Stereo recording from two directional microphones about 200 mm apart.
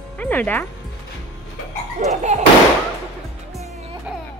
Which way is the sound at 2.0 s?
35° right (ahead or behind).